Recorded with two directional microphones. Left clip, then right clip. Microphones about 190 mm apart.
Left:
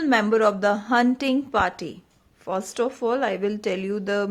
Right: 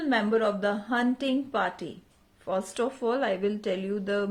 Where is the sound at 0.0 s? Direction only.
40° left (ahead or behind).